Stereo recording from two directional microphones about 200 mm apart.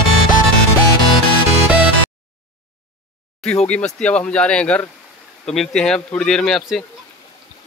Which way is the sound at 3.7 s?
5° left (ahead or behind).